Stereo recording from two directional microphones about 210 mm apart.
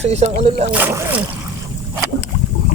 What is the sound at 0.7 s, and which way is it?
Speech, 10° right (ahead or behind).